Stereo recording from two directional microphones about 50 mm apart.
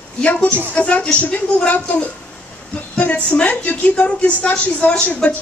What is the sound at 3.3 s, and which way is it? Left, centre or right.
A woman's voice, left.